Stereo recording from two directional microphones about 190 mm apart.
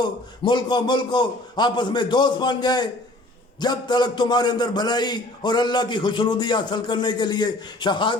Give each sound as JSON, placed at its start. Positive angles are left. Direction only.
{"t": 0.0, "sound": "a man's voice", "side_deg": 25}